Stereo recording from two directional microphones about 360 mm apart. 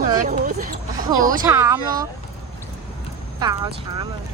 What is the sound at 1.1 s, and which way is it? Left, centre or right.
Speech, centre.